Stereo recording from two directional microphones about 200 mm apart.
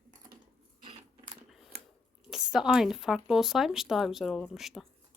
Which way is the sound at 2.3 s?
Centre (ahead or behind).